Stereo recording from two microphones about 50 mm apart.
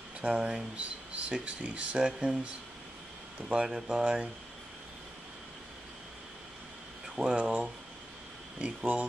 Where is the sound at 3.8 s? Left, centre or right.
Centre.